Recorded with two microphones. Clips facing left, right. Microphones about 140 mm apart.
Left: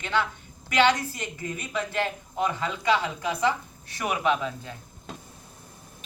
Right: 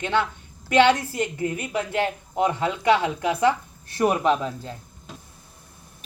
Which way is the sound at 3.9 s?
35° right (ahead or behind).